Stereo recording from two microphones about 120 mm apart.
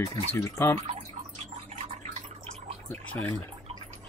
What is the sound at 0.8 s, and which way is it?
Speech, 65° right (ahead or behind).